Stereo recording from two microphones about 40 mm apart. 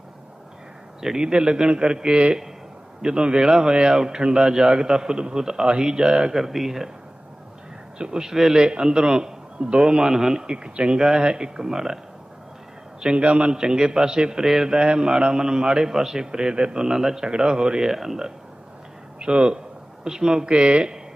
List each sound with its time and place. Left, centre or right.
1.2 s a man's voice: right
6.3 s a man's voice: centre
7.9 s a man's voice: centre
8.5 s a man's voice: right
9.6 s a man's voice: right
9.8 s a man's voice: centre
10.4 s a man's voice: right
13.1 s a man's voice: right
13.6 s a man's voice: centre
14.7 s a man's voice: right
17.2 s a man's voice: right; by 18.3 s centre
19.2 s a man's voice: right